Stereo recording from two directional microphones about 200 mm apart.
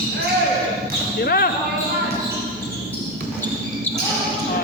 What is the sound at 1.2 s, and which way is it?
Speech, 50° left (ahead or behind).